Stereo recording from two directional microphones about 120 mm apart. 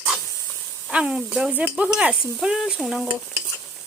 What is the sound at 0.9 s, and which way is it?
Speech, 10° right (ahead or behind).